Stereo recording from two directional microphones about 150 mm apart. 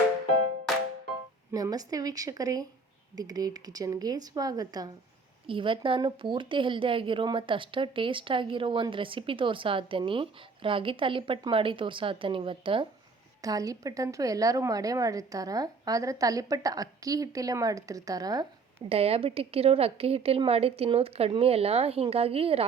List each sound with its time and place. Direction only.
1.5 s a woman's voice: 25° right (ahead or behind)
13.4 s a woman's voice: 25° right (ahead or behind)
18.9 s a woman's voice: 40° right (ahead or behind)